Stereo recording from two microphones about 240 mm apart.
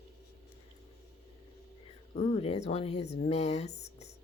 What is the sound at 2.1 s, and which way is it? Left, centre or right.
Speech, left.